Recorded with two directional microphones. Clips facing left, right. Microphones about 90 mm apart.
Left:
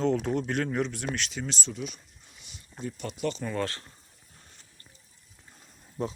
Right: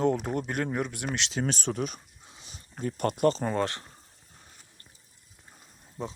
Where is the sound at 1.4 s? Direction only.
60° right (ahead or behind).